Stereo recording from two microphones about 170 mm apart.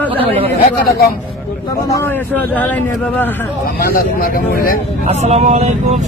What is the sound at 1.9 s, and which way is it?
Speech, 10° left (ahead or behind).